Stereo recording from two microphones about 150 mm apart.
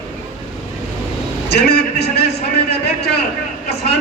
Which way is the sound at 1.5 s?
90° left.